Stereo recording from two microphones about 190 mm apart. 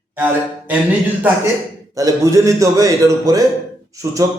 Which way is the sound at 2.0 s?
15° right (ahead or behind).